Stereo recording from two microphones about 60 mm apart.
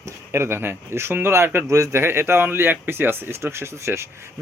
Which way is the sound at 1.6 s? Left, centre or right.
Right.